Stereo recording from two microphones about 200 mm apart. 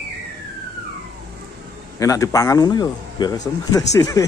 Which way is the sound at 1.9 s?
15° left (ahead or behind).